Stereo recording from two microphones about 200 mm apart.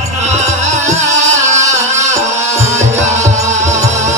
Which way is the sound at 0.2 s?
35° right (ahead or behind).